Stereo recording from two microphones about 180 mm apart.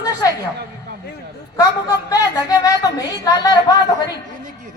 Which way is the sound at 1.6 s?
20° left (ahead or behind).